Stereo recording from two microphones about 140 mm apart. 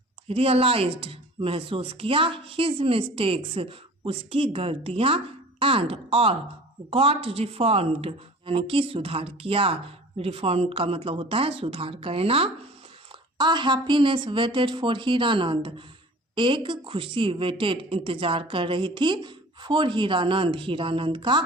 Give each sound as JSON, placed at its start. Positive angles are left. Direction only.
{"t": 0.3, "sound": "speech", "side_deg": -45}